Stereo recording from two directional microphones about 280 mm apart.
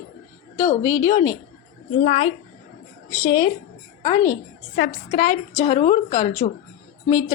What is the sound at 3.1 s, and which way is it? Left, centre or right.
A woman's voice, centre.